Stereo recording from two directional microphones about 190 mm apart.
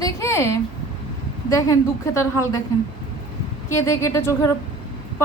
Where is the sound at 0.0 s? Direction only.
15° left (ahead or behind).